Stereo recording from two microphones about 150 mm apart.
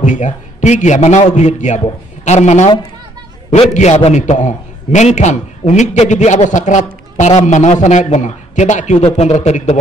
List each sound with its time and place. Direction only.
0.0 s a man's voice: 55° left (ahead or behind)
3.7 s a man's voice: 50° left (ahead or behind)